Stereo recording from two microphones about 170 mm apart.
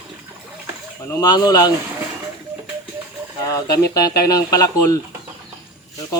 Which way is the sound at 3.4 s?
20° left (ahead or behind).